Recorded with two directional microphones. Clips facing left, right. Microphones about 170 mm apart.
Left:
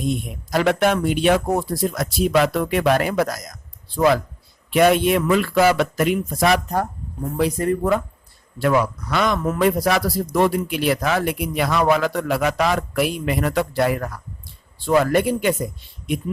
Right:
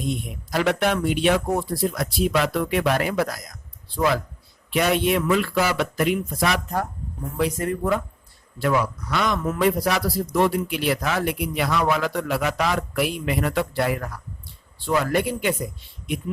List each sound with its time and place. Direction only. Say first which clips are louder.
0.5 s a man's voice: left 3 dB; 45° left (ahead or behind)
8.6 s a man's voice: left 3 dB; 55° left (ahead or behind)